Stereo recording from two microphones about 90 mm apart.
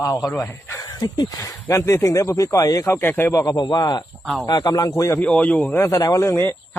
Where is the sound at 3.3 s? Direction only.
40° left (ahead or behind).